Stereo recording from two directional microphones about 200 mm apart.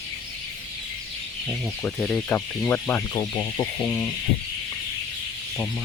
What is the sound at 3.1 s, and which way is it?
Speech, 20° left (ahead or behind).